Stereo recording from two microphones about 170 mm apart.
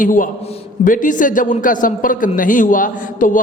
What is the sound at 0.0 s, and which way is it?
A man's voice, 50° left (ahead or behind).